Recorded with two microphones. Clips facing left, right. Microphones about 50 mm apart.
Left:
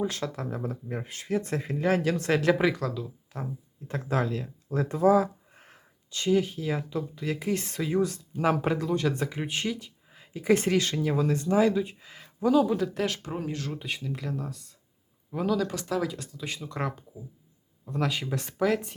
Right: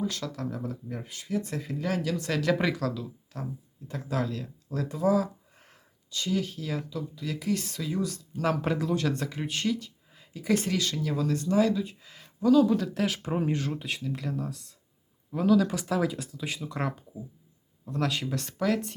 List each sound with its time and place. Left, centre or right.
0.0 s speech: left
2.5 s speech: centre
3.3 s speech: centre
3.8 s speech: left
8.4 s speech: centre
8.8 s speech: centre; by 12.6 s left
12.6 s speech: centre
13.2 s speech: centre
13.7 s speech: centre
15.6 s speech: centre